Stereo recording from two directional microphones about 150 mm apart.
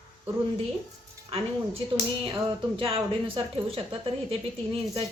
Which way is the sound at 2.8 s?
25° right (ahead or behind).